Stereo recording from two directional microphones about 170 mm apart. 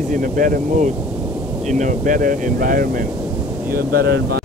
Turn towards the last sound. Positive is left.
turn(degrees=-70)  # may be behind; listen again after turning